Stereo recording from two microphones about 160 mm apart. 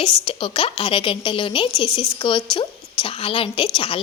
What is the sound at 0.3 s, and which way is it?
A woman's voice, 35° left (ahead or behind).